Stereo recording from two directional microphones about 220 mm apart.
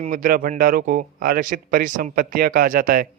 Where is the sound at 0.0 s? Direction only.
40° right (ahead or behind).